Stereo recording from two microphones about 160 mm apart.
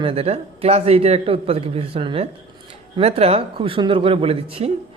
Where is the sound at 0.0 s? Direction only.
40° right (ahead or behind).